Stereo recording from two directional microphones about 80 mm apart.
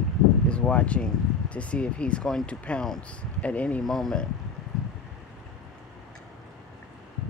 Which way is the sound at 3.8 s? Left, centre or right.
Centre.